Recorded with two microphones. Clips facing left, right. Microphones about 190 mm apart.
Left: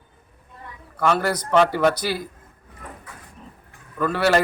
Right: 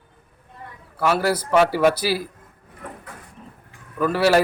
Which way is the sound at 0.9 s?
5° right (ahead or behind).